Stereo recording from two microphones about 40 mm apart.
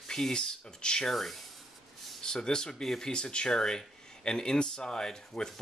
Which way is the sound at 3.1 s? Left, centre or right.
Left.